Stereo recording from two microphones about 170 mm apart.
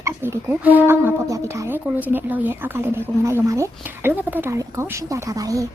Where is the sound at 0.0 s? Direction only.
15° right (ahead or behind).